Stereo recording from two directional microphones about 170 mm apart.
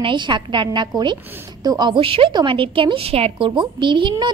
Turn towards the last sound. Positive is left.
turn(degrees=-25)  # may be behind; listen again after turning